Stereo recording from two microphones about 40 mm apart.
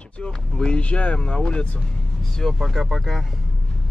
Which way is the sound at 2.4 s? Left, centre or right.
Centre.